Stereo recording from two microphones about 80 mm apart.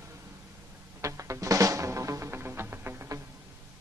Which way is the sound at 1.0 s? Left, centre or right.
Right.